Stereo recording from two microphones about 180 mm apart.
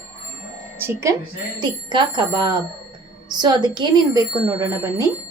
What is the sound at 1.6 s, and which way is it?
Speech, 25° right (ahead or behind).